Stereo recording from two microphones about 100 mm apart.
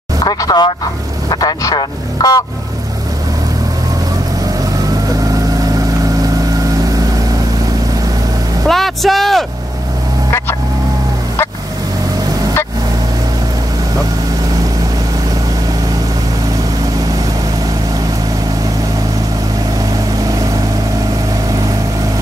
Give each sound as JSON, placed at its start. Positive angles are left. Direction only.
{"t": 0.2, "sound": "speech", "side_deg": 40}
{"t": 8.6, "sound": "speech", "side_deg": 5}